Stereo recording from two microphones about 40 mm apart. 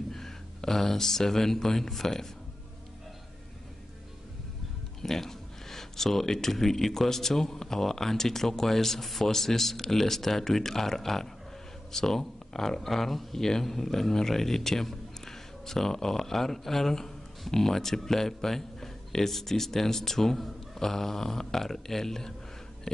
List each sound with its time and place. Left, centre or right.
0.1 s speech: centre
5.0 s speech: centre